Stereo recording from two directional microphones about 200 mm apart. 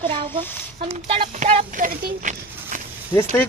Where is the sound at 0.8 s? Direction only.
30° right (ahead or behind).